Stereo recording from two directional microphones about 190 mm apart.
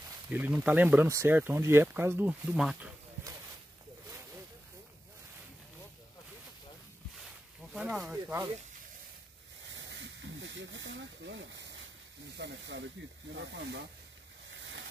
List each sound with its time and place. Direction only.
0.3 s speech: 10° right (ahead or behind)
7.7 s speech: 5° right (ahead or behind)
9.8 s snake: 70° right (ahead or behind)
12.4 s speech: 65° right (ahead or behind)